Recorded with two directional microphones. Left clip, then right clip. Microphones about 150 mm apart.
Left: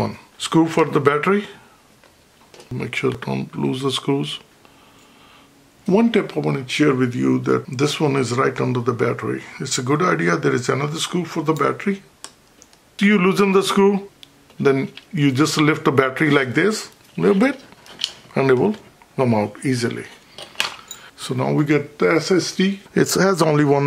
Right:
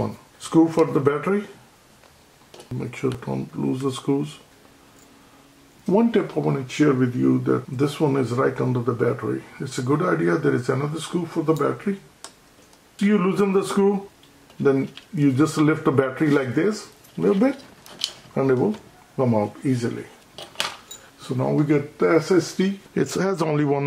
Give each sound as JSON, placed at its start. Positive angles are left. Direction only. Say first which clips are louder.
{"t": 0.0, "sound": "speech", "louder": "left 5 dB", "side_deg": 40}
{"t": 2.8, "sound": "speech", "louder": "left 5 dB", "side_deg": 40}
{"t": 5.9, "sound": "speech", "louder": "left 2 dB", "side_deg": 35}
{"t": 13.0, "sound": "speech", "louder": "left 4 dB", "side_deg": 40}
{"t": 17.8, "sound": "a sound", "louder": "left 3 dB", "side_deg": -10}
{"t": 18.3, "sound": "speech", "louder": "left 4 dB", "side_deg": 40}
{"t": 20.3, "sound": "a sound", "louder": "left 4 dB", "side_deg": 0}
{"t": 21.4, "sound": "speech", "louder": "left 2 dB", "side_deg": 35}